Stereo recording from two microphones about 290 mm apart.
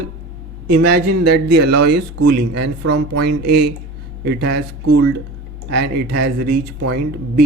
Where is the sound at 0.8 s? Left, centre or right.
Right.